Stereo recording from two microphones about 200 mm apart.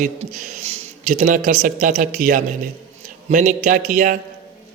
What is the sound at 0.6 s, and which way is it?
A man's voice, 35° right (ahead or behind).